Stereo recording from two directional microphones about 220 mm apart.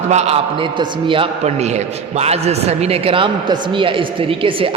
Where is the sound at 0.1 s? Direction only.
30° right (ahead or behind).